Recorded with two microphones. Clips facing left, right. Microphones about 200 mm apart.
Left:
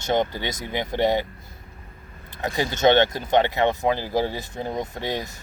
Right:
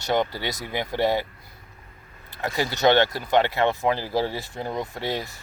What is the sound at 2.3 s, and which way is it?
Speech, 20° left (ahead or behind).